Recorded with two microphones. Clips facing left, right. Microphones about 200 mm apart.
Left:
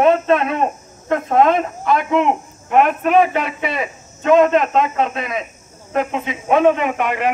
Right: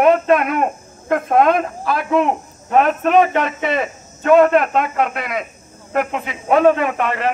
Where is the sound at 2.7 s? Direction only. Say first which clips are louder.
Even; 15° left (ahead or behind).